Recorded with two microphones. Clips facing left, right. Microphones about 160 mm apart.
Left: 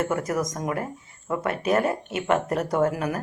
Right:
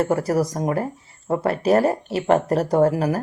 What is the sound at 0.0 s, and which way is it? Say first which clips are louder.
Speech: right 5 dB; 35° right (ahead or behind).